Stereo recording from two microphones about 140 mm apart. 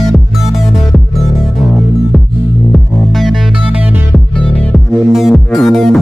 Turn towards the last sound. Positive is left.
turn(degrees=0)  # may be behind; listen again after turning